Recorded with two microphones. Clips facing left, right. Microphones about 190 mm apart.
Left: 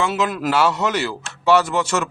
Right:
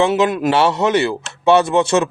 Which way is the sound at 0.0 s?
25° right (ahead or behind).